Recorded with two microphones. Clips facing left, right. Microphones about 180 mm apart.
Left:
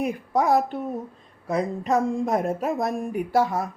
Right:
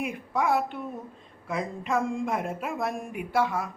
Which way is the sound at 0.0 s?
40° left (ahead or behind).